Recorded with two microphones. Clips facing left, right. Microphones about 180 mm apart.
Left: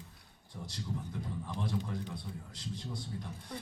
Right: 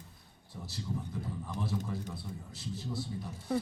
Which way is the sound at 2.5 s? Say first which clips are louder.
Right 5 dB; 5° right (ahead or behind).